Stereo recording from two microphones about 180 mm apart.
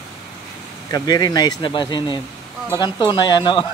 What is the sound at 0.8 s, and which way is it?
Speech, 20° left (ahead or behind).